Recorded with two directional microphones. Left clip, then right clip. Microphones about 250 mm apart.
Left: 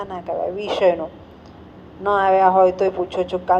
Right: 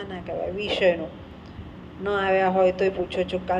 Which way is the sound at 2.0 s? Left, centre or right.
Left.